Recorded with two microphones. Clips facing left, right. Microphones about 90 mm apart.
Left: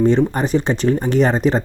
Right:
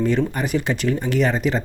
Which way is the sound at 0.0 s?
30° left (ahead or behind).